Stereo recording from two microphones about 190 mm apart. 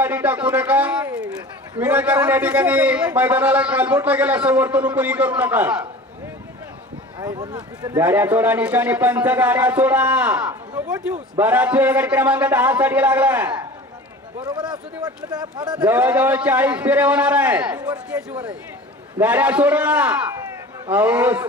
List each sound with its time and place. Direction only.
0.0 s a sound: 10° right (ahead or behind)
1.8 s a man's voice: 10° right (ahead or behind)
7.2 s a man's voice: 20° right (ahead or behind)
14.4 s speech: 20° right (ahead or behind)
15.8 s a man's voice: 10° right (ahead or behind)